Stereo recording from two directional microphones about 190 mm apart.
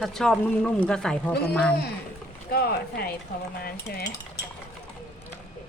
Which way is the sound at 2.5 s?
55° left (ahead or behind).